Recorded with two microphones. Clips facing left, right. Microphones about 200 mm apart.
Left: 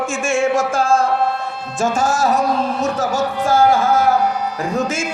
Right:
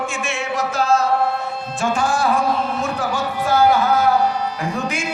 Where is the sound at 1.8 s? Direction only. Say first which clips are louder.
Left 2 dB; 40° left (ahead or behind).